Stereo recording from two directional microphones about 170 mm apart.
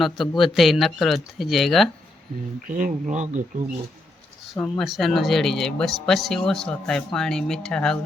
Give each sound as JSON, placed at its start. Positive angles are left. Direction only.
{"t": 0.0, "sound": "speech", "side_deg": 0}
{"t": 2.6, "sound": "speech", "side_deg": -50}
{"t": 4.5, "sound": "speech", "side_deg": 10}